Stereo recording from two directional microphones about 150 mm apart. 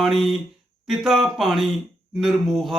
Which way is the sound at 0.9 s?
Centre (ahead or behind).